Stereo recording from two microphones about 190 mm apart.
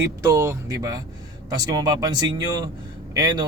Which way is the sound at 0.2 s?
15° right (ahead or behind).